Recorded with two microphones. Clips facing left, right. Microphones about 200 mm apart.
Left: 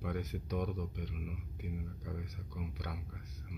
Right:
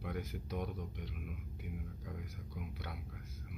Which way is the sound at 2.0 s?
45° left (ahead or behind).